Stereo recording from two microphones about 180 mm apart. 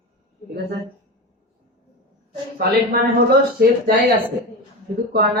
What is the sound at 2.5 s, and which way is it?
A man's voice, 60° right (ahead or behind).